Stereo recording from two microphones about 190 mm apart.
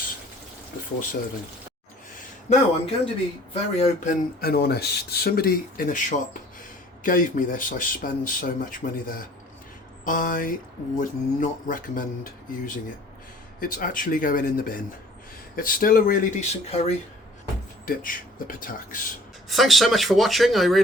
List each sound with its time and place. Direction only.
2.5 s speech: 30° left (ahead or behind)
17.8 s speech: 45° left (ahead or behind)
19.5 s speech: centre (ahead or behind)